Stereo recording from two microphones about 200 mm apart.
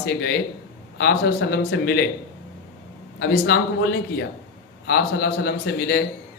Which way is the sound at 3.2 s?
55° left (ahead or behind).